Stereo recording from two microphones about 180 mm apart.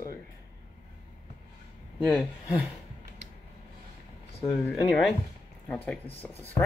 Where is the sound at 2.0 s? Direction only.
Centre (ahead or behind).